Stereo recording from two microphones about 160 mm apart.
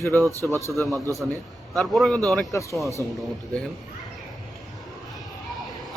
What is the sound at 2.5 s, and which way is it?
Speech, 20° left (ahead or behind).